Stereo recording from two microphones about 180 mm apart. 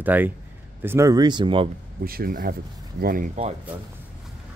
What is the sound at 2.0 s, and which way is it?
Speech, 55° right (ahead or behind).